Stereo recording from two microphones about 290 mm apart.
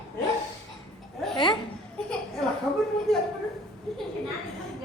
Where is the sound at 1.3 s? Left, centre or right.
Centre.